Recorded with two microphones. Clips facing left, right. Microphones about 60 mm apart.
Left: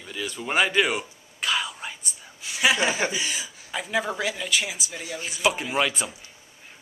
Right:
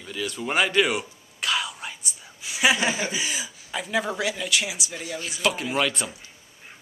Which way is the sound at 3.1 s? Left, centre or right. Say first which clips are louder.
Even; centre.